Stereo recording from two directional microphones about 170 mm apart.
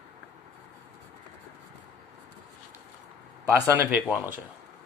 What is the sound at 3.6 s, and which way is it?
Speech, 15° right (ahead or behind).